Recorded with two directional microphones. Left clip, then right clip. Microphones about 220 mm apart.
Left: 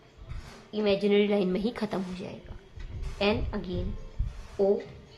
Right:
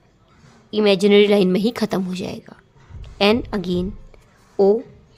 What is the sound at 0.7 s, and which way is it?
A woman's voice, 60° right (ahead or behind).